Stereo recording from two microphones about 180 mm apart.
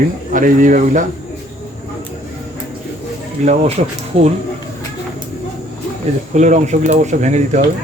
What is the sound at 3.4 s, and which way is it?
Speech, 35° right (ahead or behind).